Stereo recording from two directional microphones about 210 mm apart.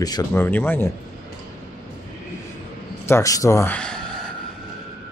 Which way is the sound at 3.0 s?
15° left (ahead or behind).